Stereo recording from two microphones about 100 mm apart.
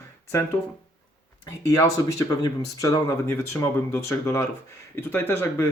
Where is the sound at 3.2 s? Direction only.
25° left (ahead or behind).